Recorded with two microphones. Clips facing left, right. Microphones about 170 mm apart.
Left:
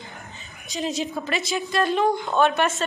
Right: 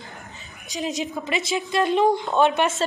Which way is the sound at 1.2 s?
20° right (ahead or behind).